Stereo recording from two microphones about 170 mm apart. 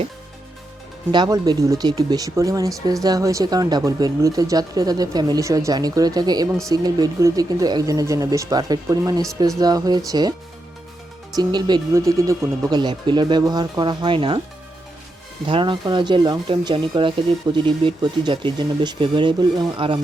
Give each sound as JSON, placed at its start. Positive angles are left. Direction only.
{"t": 1.1, "sound": "speech", "side_deg": -25}
{"t": 11.3, "sound": "speech", "side_deg": -25}
{"t": 15.4, "sound": "speech", "side_deg": -30}